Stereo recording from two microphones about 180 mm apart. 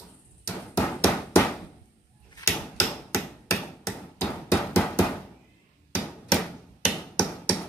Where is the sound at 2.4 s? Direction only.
15° left (ahead or behind).